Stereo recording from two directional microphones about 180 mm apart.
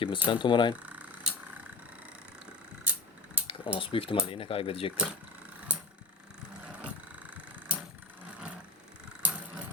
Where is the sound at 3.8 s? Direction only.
30° left (ahead or behind).